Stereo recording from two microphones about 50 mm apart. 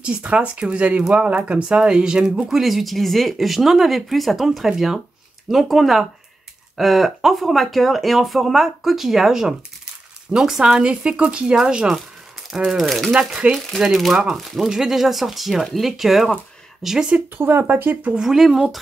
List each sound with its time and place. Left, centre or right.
0.0 s speech: right
12.4 s a sound: centre
12.7 s speech: centre
13.1 s speech: centre
14.1 s speech: centre
17.4 s speech: right
18.1 s speech: centre